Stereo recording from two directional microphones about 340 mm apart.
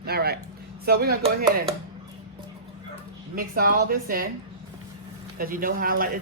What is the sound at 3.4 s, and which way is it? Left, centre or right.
Speech, right.